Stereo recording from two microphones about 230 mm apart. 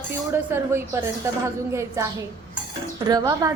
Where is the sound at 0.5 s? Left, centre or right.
Centre.